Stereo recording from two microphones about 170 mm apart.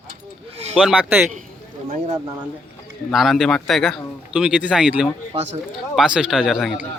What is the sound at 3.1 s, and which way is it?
Speech, centre (ahead or behind).